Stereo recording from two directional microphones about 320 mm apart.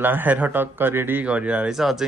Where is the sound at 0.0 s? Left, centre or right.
Centre.